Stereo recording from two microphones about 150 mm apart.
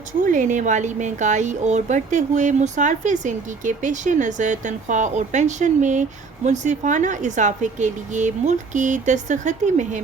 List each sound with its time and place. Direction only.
0.3 s speech: 60° right (ahead or behind)